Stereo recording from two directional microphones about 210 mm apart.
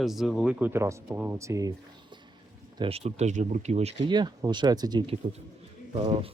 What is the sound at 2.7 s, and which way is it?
Speech, 25° right (ahead or behind).